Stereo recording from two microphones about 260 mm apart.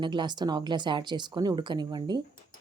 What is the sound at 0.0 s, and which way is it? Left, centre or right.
Speech, centre.